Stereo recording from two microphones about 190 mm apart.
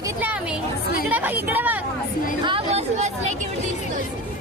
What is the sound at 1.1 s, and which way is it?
Speech, 10° right (ahead or behind).